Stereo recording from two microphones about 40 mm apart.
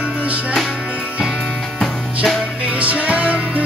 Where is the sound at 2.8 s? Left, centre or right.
Right.